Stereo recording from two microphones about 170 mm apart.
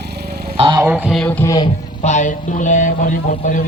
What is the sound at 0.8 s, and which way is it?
Speech, 10° right (ahead or behind).